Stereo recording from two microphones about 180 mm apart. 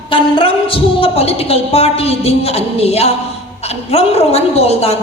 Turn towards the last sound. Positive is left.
turn(degrees=35)  # may be behind; listen again after turning